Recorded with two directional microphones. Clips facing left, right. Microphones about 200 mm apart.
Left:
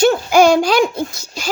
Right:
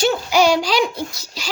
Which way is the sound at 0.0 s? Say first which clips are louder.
Left 5 dB; 50° left (ahead or behind).